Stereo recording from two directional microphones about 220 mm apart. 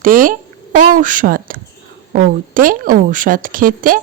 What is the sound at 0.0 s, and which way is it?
A woman's voice, 40° right (ahead or behind).